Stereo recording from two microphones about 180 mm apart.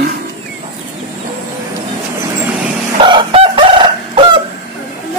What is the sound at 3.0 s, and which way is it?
Chicken, 30° right (ahead or behind).